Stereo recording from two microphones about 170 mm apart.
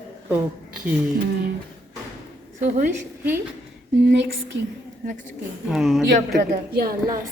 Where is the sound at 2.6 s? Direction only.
45° right (ahead or behind).